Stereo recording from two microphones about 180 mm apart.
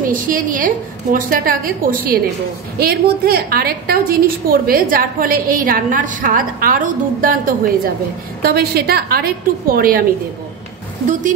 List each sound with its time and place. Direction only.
0.0 s a woman's voice: 50° right (ahead or behind)